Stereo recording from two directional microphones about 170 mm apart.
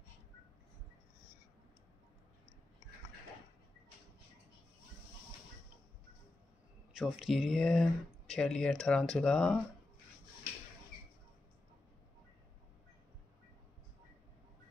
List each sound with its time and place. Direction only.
6.9 s speech: 5° right (ahead or behind)